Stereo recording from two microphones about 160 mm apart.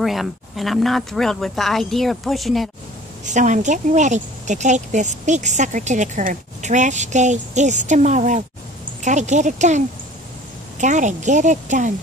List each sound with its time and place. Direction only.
0.0 s speech: centre (ahead or behind)
3.3 s speech: 50° right (ahead or behind)